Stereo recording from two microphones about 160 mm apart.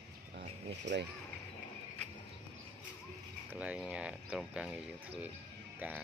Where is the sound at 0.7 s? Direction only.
90° right.